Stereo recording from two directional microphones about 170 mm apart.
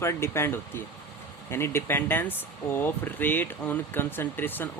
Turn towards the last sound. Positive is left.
turn(degrees=10)  # may be behind; listen again after turning